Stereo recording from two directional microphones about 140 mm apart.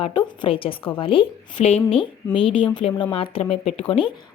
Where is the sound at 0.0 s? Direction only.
35° left (ahead or behind).